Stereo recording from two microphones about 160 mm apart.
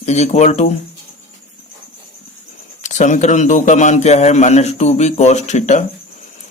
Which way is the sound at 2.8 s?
50° left (ahead or behind).